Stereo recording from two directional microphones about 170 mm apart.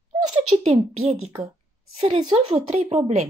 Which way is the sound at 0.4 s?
40° right (ahead or behind).